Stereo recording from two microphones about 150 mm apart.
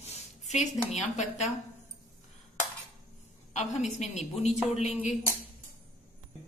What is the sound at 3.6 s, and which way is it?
Speech, 50° left (ahead or behind).